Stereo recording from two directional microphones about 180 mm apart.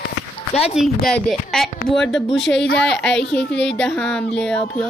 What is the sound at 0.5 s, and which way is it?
Speech, 35° left (ahead or behind).